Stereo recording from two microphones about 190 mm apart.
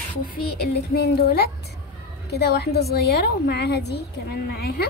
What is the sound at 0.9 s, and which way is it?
A woman's voice, 55° left (ahead or behind).